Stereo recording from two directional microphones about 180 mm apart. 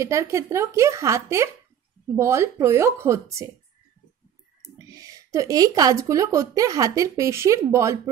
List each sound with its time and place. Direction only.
0.0 s speech: 15° right (ahead or behind)
4.7 s speech: 20° right (ahead or behind)